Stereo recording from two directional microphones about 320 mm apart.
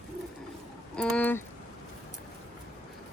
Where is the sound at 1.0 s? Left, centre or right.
Centre.